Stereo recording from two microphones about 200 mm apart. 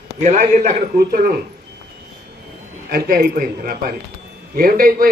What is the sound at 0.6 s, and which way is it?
Speech, 50° right (ahead or behind).